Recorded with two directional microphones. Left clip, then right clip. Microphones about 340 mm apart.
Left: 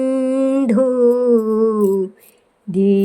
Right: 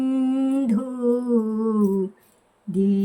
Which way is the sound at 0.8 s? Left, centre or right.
Centre.